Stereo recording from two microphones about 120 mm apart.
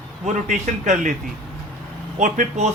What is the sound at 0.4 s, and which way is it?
Speech, 85° right.